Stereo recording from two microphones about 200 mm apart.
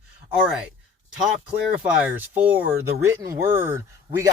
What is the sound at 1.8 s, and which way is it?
Speech, 10° right (ahead or behind).